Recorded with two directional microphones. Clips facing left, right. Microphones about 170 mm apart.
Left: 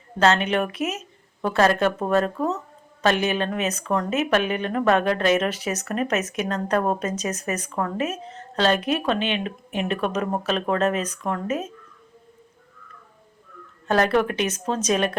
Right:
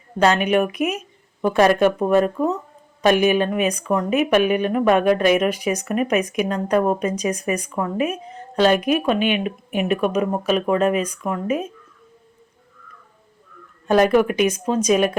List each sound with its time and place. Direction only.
0.2 s speech: 15° right (ahead or behind)
13.8 s speech: 15° right (ahead or behind)